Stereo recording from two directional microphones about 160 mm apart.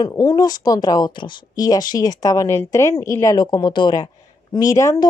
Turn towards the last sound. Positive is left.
turn(degrees=20)  # may be behind; listen again after turning